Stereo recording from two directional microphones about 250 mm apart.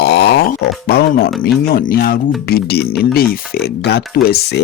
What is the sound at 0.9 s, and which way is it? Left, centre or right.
Speech, left.